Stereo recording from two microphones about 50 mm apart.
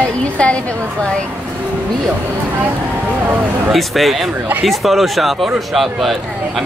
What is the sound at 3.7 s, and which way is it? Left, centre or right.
Speech, centre.